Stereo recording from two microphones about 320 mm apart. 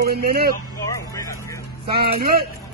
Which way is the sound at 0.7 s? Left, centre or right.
Centre.